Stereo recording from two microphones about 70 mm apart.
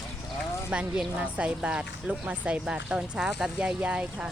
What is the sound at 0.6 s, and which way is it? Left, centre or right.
A woman's voice, centre.